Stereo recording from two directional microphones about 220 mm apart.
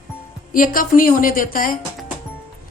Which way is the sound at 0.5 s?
40° left (ahead or behind).